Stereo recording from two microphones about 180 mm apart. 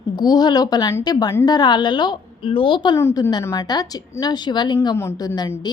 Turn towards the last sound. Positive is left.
turn(degrees=20)  # may be behind; listen again after turning